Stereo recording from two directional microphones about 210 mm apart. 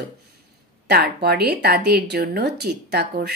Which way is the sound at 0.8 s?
50° right (ahead or behind).